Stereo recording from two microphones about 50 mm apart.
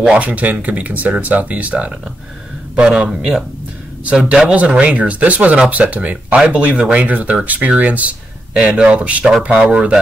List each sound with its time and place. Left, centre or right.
0.0 s speech: right
2.7 s a man's voice: centre
8.5 s a man's voice: centre
8.8 s speech: right